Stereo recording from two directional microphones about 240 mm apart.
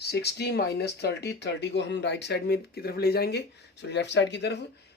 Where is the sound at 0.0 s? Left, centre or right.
Left.